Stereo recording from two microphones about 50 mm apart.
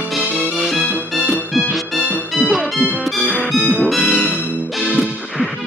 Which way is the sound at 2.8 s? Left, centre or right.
Right.